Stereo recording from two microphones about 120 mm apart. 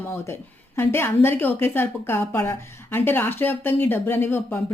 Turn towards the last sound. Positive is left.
turn(degrees=20)  # may be behind; listen again after turning